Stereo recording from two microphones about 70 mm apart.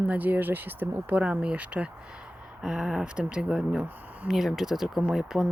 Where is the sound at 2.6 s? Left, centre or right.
Centre.